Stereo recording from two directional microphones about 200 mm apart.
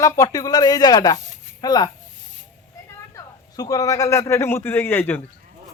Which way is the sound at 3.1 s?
15° left (ahead or behind).